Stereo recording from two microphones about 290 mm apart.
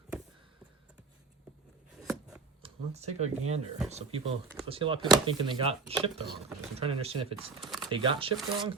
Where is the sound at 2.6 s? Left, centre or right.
Right.